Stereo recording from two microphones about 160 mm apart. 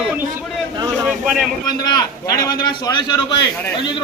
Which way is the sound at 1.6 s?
25° left (ahead or behind).